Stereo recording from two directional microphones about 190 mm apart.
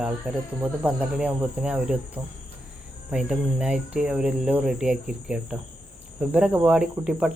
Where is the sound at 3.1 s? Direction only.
5° right (ahead or behind).